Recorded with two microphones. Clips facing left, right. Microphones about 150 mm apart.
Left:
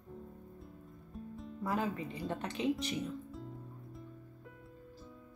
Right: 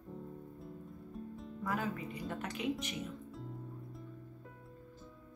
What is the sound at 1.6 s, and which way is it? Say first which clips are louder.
Speech: left 2 dB; 30° left (ahead or behind).